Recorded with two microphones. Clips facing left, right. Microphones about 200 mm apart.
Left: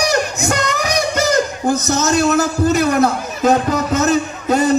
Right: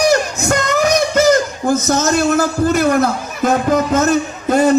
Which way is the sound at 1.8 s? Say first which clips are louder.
Even; 50° right (ahead or behind).